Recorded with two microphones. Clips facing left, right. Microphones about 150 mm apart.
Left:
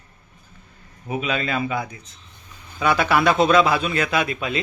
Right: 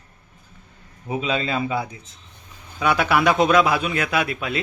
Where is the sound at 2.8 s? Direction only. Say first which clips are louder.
Even; 10° right (ahead or behind).